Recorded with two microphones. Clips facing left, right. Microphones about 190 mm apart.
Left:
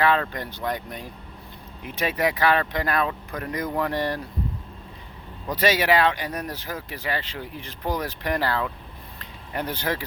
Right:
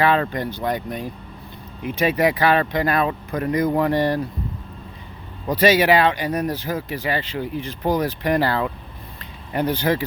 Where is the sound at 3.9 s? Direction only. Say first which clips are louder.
Right 7 dB; centre (ahead or behind).